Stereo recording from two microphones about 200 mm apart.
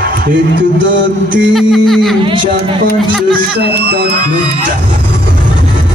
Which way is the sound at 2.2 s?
25° right (ahead or behind).